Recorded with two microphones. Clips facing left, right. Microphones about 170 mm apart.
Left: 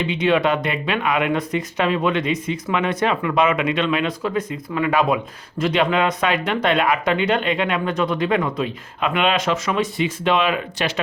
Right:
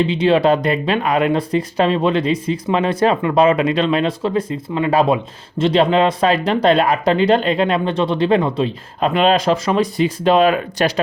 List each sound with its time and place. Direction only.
0.0 s speech: 30° right (ahead or behind)